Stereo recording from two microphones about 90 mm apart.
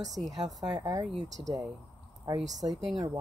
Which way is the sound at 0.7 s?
55° right (ahead or behind).